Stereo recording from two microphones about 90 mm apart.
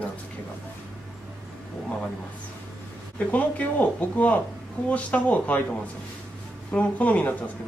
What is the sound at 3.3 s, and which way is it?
Speech, 15° left (ahead or behind).